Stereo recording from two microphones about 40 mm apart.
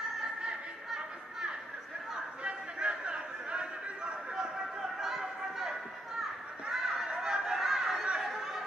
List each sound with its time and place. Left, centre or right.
2.4 s chatter: right
4.4 s a sound: centre
8.2 s chatter: centre